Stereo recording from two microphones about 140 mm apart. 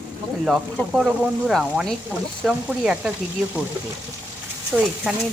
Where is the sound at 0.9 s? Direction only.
Centre (ahead or behind).